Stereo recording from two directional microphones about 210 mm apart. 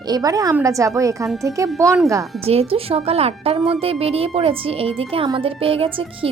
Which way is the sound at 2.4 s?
30° right (ahead or behind).